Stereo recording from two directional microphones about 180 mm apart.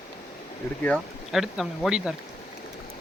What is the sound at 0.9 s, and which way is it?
Speech, centre (ahead or behind).